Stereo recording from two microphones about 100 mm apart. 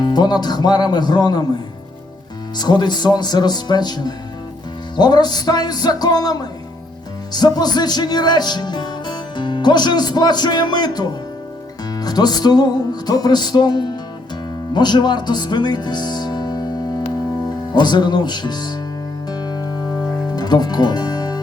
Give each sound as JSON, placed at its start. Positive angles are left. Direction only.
{"t": 0.0, "sound": "music", "side_deg": 45}
{"t": 2.6, "sound": "music", "side_deg": 45}
{"t": 14.7, "sound": "speech", "side_deg": 45}
{"t": 17.7, "sound": "music", "side_deg": 45}